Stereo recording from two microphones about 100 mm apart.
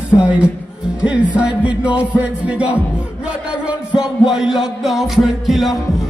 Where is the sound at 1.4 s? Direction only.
10° right (ahead or behind).